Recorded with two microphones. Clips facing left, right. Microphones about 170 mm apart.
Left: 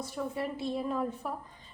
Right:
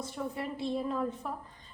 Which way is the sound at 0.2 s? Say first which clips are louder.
Left 1 dB; 5° right (ahead or behind).